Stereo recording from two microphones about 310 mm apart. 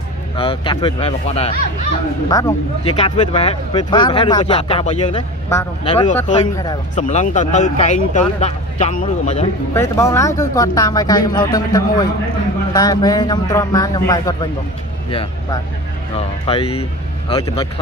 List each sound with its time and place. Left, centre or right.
0.4 s speech: centre
9.8 s speech: centre